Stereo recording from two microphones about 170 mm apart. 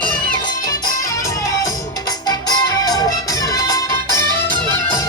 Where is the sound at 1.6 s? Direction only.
20° left (ahead or behind).